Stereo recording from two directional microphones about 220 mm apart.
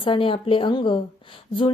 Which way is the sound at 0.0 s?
25° left (ahead or behind).